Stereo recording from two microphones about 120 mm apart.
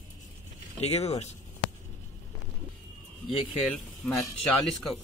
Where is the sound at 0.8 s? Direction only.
60° left (ahead or behind).